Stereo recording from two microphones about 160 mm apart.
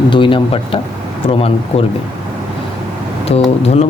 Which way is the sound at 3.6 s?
40° left (ahead or behind).